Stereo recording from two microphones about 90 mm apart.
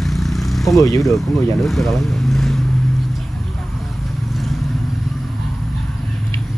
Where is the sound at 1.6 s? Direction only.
Centre (ahead or behind).